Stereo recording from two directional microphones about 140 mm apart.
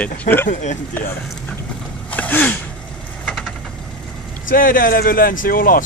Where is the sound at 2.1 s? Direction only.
10° left (ahead or behind).